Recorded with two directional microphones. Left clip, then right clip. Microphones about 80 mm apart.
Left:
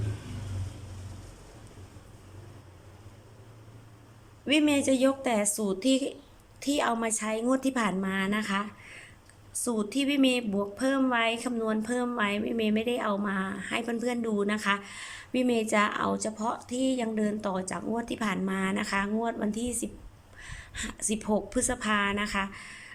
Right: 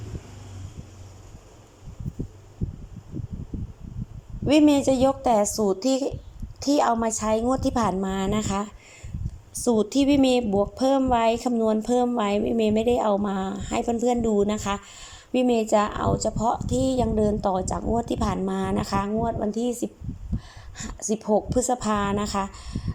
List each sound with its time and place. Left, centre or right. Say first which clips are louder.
4.4 s a woman's voice: right 6 dB; right
8.0 s speech: right 3 dB; right
9.6 s speech: right 8 dB; right
13.8 s speech: right 8 dB; right
19.3 s a woman's voice: right 6 dB; centre
20.3 s a sound: left 2 dB; centre
21.3 s speech: right 8 dB; right